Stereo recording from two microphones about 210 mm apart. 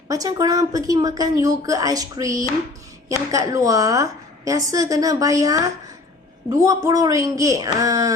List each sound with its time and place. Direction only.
0.1 s a woman's voice: 15° right (ahead or behind)